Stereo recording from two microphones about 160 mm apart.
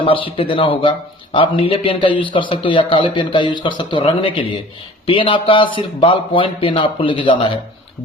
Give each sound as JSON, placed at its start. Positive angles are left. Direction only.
{"t": 0.0, "sound": "a man's voice", "side_deg": 35}